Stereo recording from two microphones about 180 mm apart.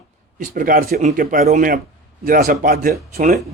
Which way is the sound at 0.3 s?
50° right (ahead or behind).